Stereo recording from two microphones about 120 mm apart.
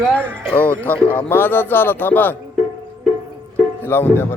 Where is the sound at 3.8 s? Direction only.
20° left (ahead or behind).